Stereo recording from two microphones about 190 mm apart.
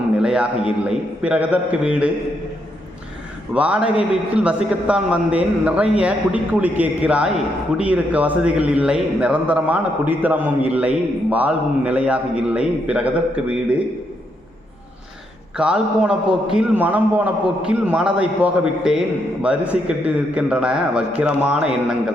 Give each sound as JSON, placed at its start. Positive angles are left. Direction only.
{"t": 0.2, "sound": "a man's voice", "side_deg": -5}
{"t": 3.5, "sound": "a man's voice", "side_deg": -5}
{"t": 15.5, "sound": "a man's voice", "side_deg": -5}